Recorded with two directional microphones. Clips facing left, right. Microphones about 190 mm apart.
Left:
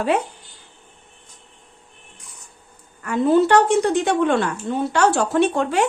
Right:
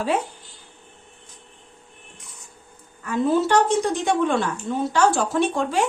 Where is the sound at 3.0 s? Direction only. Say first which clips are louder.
Left 4 dB; 65° left (ahead or behind).